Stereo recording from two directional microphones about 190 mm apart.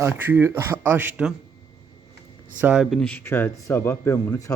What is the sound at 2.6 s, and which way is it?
A man's voice, 5° right (ahead or behind).